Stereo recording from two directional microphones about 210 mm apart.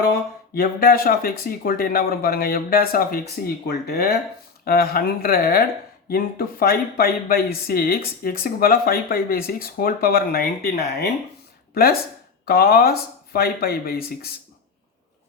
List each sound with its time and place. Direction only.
0.5 s speech: 45° left (ahead or behind)